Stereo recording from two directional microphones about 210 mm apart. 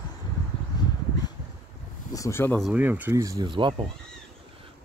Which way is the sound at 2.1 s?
15° left (ahead or behind).